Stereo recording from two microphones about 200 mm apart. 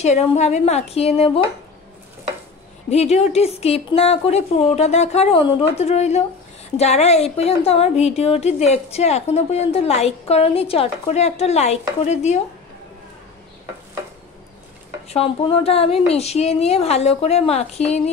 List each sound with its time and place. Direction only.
0.0 s a woman's voice: 30° left (ahead or behind)
2.9 s a woman's voice: 30° left (ahead or behind)
15.0 s a woman's voice: 30° left (ahead or behind)